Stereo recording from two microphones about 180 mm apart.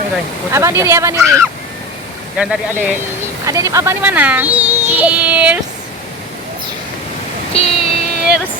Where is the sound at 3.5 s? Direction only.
15° right (ahead or behind).